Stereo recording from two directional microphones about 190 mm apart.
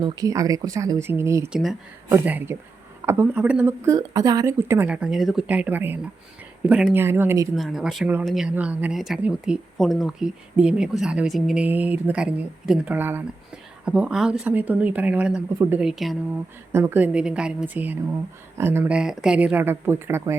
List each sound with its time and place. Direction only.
0.0 s speech: 20° right (ahead or behind)
7.5 s speech: centre (ahead or behind)
16.7 s speech: 10° right (ahead or behind)